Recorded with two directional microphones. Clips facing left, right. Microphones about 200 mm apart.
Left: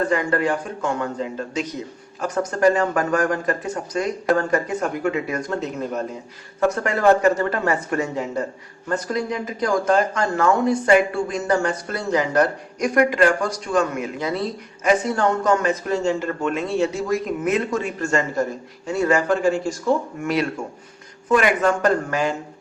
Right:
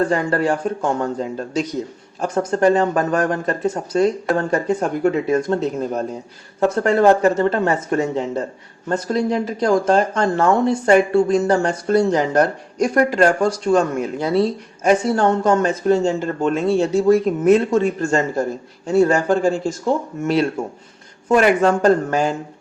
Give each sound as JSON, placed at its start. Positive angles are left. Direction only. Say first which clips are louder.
{"t": 0.1, "sound": "speech", "louder": "right 2 dB", "side_deg": -35}